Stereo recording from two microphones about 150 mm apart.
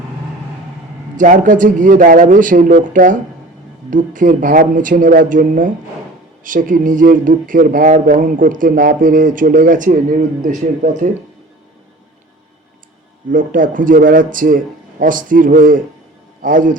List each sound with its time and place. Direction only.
1.1 s speech: 60° right (ahead or behind)
13.3 s speech: 65° right (ahead or behind)